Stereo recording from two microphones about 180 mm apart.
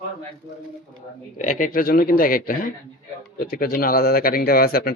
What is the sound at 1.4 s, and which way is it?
A man's voice, 45° left (ahead or behind).